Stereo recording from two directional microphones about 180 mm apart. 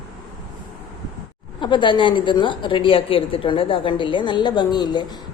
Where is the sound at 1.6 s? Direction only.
25° left (ahead or behind).